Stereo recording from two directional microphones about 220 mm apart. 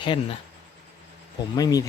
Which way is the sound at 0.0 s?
25° left (ahead or behind).